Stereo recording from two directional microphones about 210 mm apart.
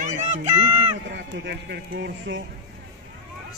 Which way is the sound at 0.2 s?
35° right (ahead or behind).